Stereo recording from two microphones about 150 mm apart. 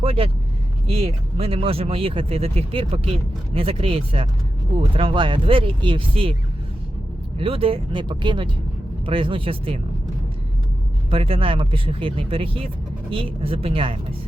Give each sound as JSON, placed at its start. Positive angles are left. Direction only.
{"t": 0.0, "sound": "speech", "side_deg": -40}
{"t": 7.3, "sound": "speech", "side_deg": -35}
{"t": 11.1, "sound": "speech", "side_deg": -40}